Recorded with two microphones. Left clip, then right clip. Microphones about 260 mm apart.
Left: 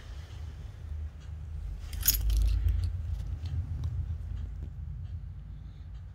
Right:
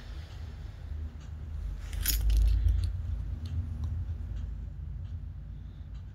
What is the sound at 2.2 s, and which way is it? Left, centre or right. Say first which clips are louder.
Keys jangling: even; left.